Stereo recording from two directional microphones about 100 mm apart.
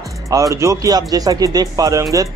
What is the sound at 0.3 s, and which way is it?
Speech, 35° right (ahead or behind).